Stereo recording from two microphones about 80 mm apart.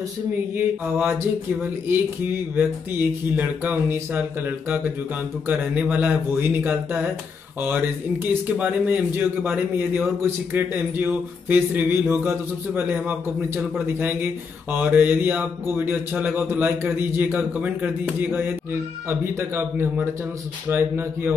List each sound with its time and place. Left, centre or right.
0.6 s mantra: right